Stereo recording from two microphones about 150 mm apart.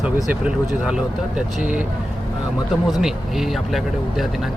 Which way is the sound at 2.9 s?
Centre (ahead or behind).